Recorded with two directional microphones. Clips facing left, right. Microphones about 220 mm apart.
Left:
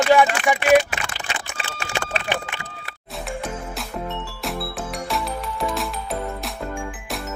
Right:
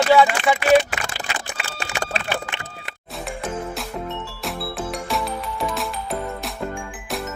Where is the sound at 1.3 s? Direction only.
40° right (ahead or behind).